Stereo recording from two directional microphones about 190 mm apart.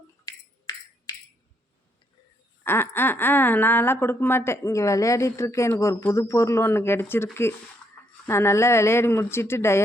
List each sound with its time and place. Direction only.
0.3 s music: 20° left (ahead or behind)
2.6 s speech: 10° left (ahead or behind)
8.3 s speech: 15° left (ahead or behind)